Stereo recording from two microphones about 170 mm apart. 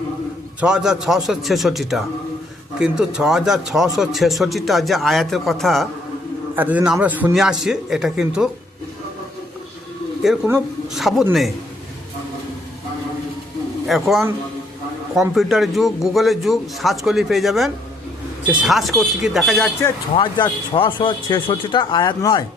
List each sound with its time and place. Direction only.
0.6 s speech: 5° right (ahead or behind)
6.6 s speech: 10° right (ahead or behind)
10.2 s speech: 5° right (ahead or behind)
13.8 s speech: centre (ahead or behind)
15.4 s speech: centre (ahead or behind)
20.1 s speech: 25° left (ahead or behind)